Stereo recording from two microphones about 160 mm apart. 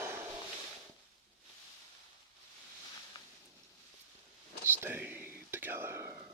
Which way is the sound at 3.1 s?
25° left (ahead or behind).